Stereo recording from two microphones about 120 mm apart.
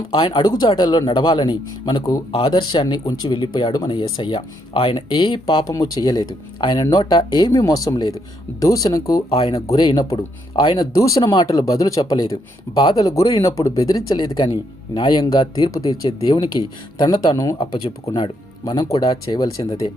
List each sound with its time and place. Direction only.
0.1 s speech: 40° left (ahead or behind)
9.3 s speech: 55° left (ahead or behind)
9.6 s speech: 30° left (ahead or behind)
10.5 s speech: 45° left (ahead or behind)
10.8 s speech: 30° left (ahead or behind)
11.2 s speech: 40° left (ahead or behind)
11.5 s speech: 30° left (ahead or behind)
17.6 s speech: 45° left (ahead or behind)